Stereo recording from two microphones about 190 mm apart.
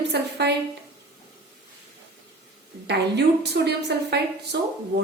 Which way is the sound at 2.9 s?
60° right (ahead or behind).